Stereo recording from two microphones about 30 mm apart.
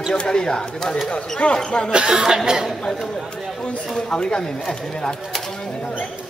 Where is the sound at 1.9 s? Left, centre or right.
Right.